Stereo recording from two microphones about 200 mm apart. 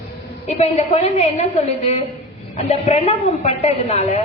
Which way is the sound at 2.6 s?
30° left (ahead or behind).